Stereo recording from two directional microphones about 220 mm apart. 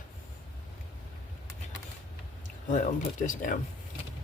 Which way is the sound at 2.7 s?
35° left (ahead or behind).